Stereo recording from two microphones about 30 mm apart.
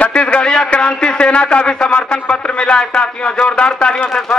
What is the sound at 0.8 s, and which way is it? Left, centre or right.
A man's voice, left.